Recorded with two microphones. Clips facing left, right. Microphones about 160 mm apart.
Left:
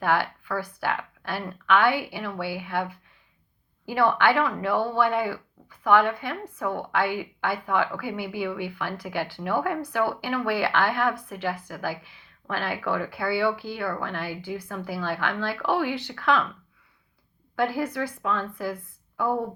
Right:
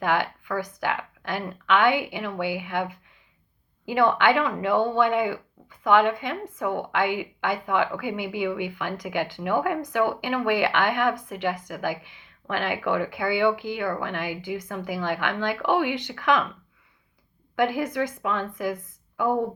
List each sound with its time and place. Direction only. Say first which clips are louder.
0.0 s speech: even; 15° right (ahead or behind)
17.6 s speech: right 2 dB; 20° right (ahead or behind)